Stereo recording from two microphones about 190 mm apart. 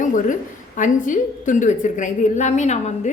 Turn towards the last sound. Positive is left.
turn(degrees=35)  # may be behind; listen again after turning